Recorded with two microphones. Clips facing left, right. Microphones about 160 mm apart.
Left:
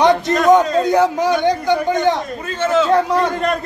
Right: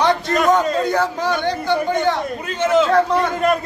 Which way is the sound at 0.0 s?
15° left (ahead or behind).